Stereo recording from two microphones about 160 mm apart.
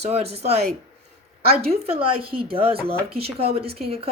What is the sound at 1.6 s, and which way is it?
Speech, 40° right (ahead or behind).